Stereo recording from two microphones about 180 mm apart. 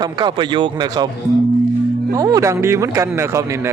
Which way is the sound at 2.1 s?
20° right (ahead or behind).